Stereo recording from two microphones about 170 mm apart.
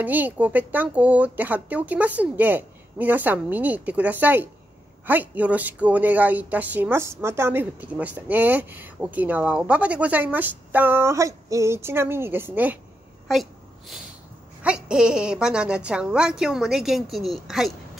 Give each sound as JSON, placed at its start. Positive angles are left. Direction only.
{"t": 0.0, "sound": "a woman's voice", "side_deg": -10}
{"t": 13.3, "sound": "a woman's voice", "side_deg": 0}